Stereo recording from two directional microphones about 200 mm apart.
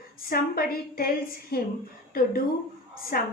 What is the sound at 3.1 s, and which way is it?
Speech, 45° left (ahead or behind).